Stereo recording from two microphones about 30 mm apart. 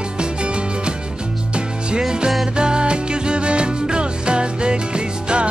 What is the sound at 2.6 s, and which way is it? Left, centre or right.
Music, right.